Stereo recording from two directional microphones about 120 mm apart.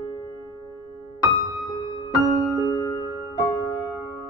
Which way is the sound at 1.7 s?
30° left (ahead or behind).